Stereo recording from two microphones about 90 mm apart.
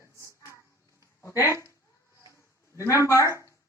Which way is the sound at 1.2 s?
35° left (ahead or behind).